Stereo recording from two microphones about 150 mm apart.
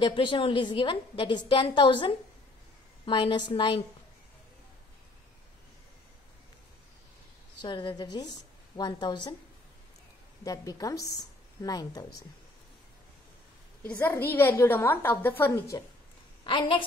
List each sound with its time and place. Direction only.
0.0 s a woman's voice: 35° left (ahead or behind)
7.6 s a woman's voice: 30° left (ahead or behind)
10.4 s a woman's voice: 25° left (ahead or behind)
13.8 s a woman's voice: 15° left (ahead or behind)
16.4 s a woman's voice: 35° left (ahead or behind)